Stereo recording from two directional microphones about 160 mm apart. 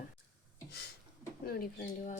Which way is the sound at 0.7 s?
90° left.